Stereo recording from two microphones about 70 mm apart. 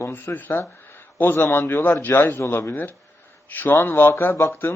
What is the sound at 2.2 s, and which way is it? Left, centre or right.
Speech, left.